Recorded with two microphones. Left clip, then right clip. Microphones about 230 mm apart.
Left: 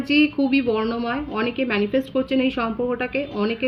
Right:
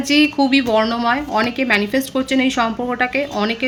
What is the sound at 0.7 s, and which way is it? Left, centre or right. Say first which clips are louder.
A woman's voice: right 7 dB; centre.